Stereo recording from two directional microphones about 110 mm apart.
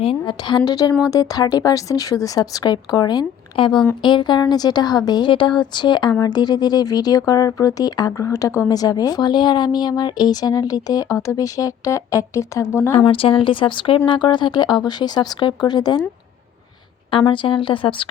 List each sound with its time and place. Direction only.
0.0 s a woman's voice: 60° left (ahead or behind)
0.4 s speech: 40° left (ahead or behind); by 13.1 s 25° left (ahead or behind)
13.1 s speech: 55° left (ahead or behind); by 16.0 s 40° left (ahead or behind)
17.1 s speech: 50° left (ahead or behind)